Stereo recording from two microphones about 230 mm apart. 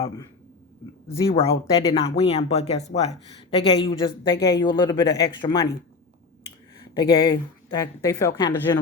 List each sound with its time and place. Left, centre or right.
1.0 s speech: centre
6.9 s a woman's voice: centre